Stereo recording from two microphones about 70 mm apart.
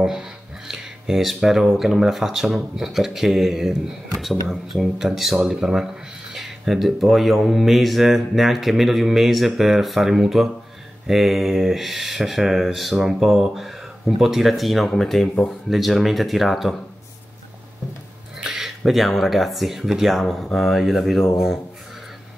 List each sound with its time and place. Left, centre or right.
0.7 s speech: centre
18.4 s speech: centre